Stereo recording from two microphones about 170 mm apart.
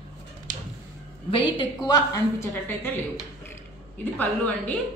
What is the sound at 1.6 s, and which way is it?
Speech, 20° left (ahead or behind).